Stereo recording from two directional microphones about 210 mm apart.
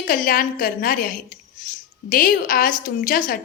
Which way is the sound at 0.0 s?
40° left (ahead or behind).